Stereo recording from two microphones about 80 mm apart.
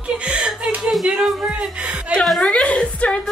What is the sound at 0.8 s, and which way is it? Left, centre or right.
A woman's voice, centre.